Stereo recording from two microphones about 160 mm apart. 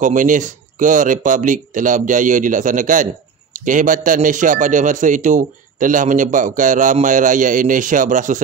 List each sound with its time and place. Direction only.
0.0 s speech: 55° right (ahead or behind)